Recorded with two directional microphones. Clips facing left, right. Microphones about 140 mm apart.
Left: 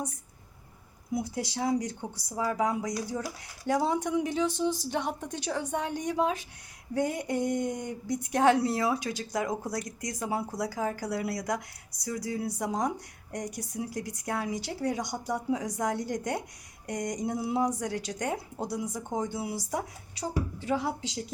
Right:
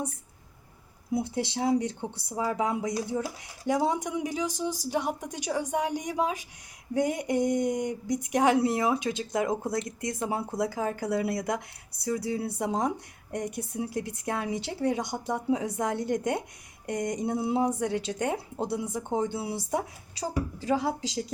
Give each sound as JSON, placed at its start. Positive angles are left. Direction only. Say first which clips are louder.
{"t": 1.1, "sound": "a woman's voice", "louder": "right 3 dB", "side_deg": -25}